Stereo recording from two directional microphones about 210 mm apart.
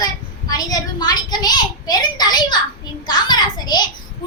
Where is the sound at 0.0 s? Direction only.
15° left (ahead or behind).